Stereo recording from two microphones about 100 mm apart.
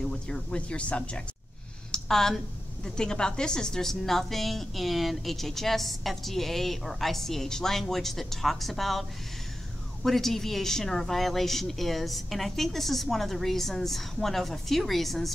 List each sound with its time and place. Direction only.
0.0 s speech: 10° left (ahead or behind)
1.9 s a sound: 5° left (ahead or behind)
2.8 s a woman's voice: 5° left (ahead or behind)
10.0 s a woman's voice: centre (ahead or behind)